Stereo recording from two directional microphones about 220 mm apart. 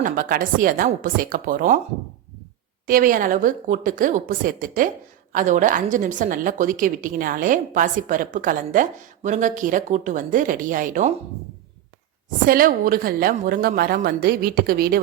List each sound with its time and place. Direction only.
0.0 s a woman's voice: 40° right (ahead or behind)
2.8 s a woman's voice: 40° right (ahead or behind)
12.5 s a woman's voice: 40° right (ahead or behind)